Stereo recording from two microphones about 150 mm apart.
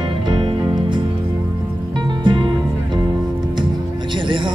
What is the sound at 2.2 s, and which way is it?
Music, 30° right (ahead or behind).